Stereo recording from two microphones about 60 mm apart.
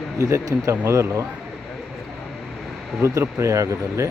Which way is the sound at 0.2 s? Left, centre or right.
Right.